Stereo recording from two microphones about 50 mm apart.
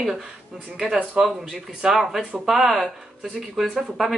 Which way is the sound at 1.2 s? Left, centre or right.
Centre.